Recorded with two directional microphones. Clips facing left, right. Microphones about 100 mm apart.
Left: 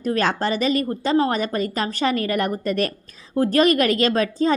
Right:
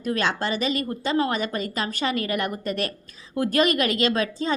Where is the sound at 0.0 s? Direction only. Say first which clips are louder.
Left 4 dB; 40° left (ahead or behind).